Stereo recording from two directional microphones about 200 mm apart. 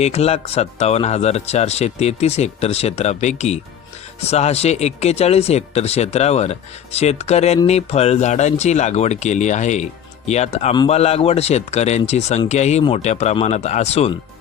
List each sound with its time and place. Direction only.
0.0 s speech: 30° left (ahead or behind)